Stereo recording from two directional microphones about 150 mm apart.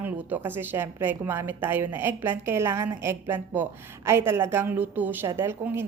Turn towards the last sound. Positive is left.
turn(degrees=-15)  # may be behind; listen again after turning